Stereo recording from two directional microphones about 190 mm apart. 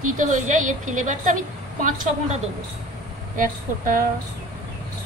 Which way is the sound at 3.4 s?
45° right (ahead or behind).